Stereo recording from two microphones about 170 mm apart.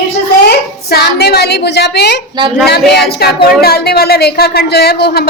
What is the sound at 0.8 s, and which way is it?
A woman's voice, 70° left (ahead or behind).